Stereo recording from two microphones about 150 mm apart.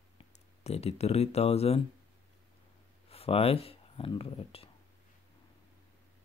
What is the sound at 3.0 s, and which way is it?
Speech, 40° left (ahead or behind).